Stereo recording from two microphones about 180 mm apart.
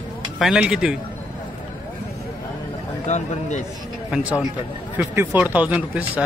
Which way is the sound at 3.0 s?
40° left (ahead or behind).